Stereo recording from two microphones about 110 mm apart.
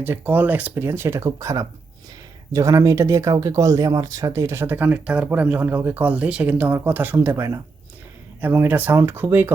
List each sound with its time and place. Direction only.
0.0 s speech: 15° right (ahead or behind)